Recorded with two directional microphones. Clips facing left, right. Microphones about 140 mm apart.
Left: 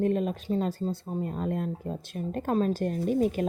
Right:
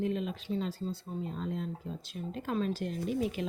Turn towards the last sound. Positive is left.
turn(degrees=45)  # may be behind; listen again after turning